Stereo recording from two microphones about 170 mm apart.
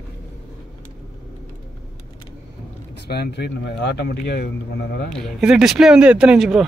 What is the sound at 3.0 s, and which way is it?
Speech, 75° left (ahead or behind).